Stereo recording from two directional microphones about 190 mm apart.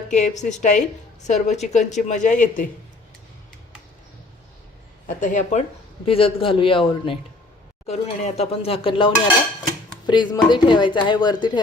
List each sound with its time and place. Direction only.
0.1 s speech: 40° left (ahead or behind)
5.0 s speech: 40° left (ahead or behind)
6.1 s speech: 30° left (ahead or behind)
7.9 s speech: 35° left (ahead or behind)